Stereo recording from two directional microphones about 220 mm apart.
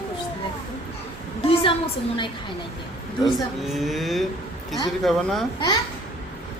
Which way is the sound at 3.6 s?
Centre (ahead or behind).